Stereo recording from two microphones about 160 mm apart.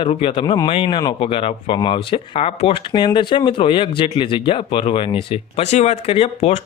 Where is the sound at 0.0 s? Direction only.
35° left (ahead or behind).